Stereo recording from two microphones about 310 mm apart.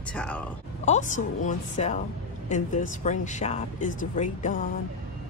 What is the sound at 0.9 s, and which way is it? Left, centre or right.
A woman's voice, left.